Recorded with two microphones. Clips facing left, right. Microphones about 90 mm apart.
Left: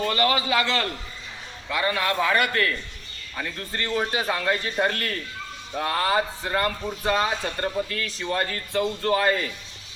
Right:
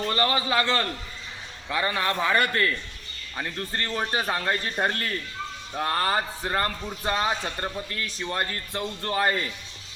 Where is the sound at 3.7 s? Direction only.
35° right (ahead or behind).